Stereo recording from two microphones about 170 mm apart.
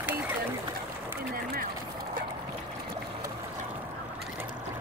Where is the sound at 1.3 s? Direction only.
60° right (ahead or behind).